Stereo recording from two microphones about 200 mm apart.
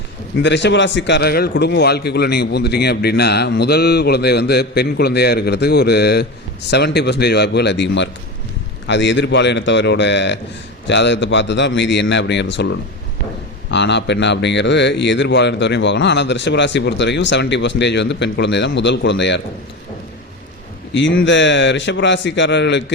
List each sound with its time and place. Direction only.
0.4 s a man's voice: 60° left (ahead or behind)
20.9 s a man's voice: 65° left (ahead or behind)